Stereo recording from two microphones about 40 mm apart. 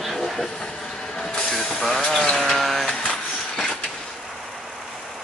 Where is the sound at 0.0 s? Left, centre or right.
Centre.